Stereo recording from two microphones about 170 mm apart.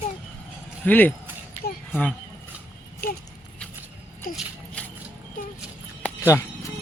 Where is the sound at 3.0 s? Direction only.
60° left (ahead or behind).